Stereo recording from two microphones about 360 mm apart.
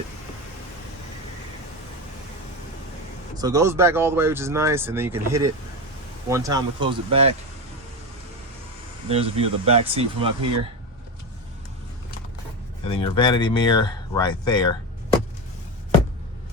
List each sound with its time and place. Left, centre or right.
3.3 s speech: centre
9.0 s speech: centre
12.8 s speech: centre